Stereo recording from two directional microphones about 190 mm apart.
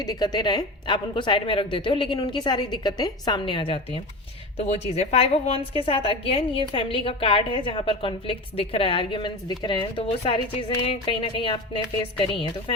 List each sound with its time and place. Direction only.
0.0 s a woman's voice: 20° left (ahead or behind)